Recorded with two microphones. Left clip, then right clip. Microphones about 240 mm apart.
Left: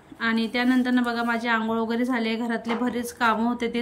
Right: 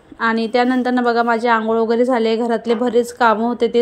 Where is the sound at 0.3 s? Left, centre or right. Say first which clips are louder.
Right 7 dB; centre.